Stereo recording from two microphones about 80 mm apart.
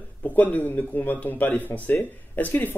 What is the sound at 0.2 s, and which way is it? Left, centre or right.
Speech, centre.